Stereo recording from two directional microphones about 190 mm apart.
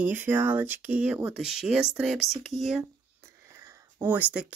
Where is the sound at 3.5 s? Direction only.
15° right (ahead or behind).